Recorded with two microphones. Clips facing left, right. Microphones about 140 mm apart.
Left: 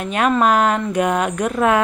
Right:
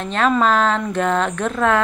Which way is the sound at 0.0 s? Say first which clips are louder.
Left 1 dB; 10° left (ahead or behind).